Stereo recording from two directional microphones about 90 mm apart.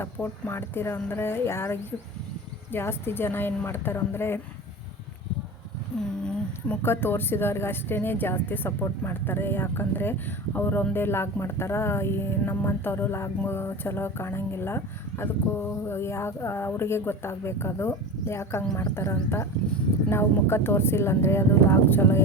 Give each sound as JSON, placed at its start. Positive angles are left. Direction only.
{"t": 0.0, "sound": "speech", "side_deg": 25}
{"t": 6.0, "sound": "speech", "side_deg": 10}
{"t": 6.8, "sound": "speech", "side_deg": 25}